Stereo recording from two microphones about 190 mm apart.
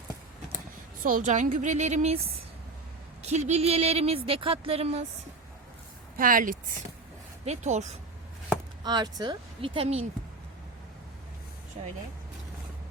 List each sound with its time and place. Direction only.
1.0 s a woman's voice: 40° right (ahead or behind)
3.2 s a woman's voice: 35° right (ahead or behind)
6.1 s a woman's voice: 45° right (ahead or behind)
8.8 s speech: 20° right (ahead or behind)
11.8 s speech: 30° right (ahead or behind)